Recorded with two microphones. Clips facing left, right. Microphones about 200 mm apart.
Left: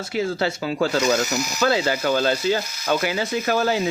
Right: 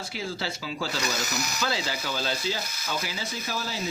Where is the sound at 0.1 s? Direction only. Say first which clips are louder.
Left 12 dB; 55° left (ahead or behind).